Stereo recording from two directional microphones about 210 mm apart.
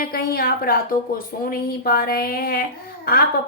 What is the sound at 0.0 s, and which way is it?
A woman's voice, 45° left (ahead or behind).